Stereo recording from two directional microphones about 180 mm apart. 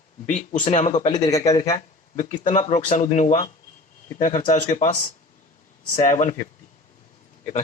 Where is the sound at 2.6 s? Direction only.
40° left (ahead or behind).